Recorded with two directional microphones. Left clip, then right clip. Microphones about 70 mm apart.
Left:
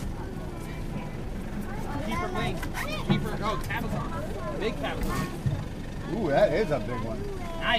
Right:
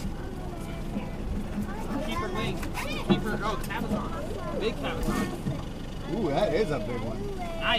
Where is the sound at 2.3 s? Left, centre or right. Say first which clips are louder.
Left 1 dB; left.